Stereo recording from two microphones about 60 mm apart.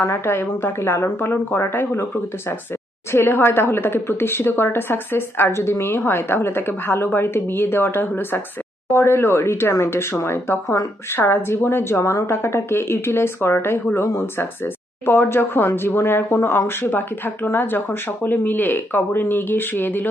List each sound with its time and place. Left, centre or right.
0.0 s speech: left
3.1 s speech: left